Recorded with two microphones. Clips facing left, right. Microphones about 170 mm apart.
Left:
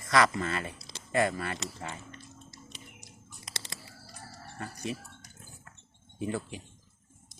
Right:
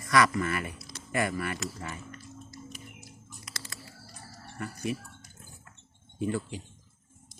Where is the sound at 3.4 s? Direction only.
25° left (ahead or behind).